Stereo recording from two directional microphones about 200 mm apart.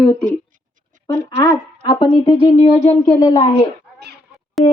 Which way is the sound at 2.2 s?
30° left (ahead or behind).